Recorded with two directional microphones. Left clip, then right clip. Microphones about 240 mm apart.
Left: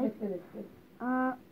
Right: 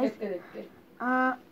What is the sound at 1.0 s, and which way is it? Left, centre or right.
Speech, right.